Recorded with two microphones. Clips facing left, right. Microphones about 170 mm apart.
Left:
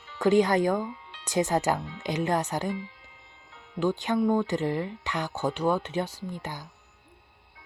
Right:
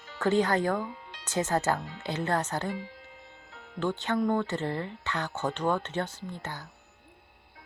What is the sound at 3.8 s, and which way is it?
Speech, 15° left (ahead or behind).